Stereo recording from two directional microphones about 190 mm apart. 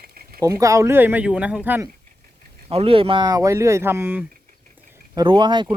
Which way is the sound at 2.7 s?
30° right (ahead or behind).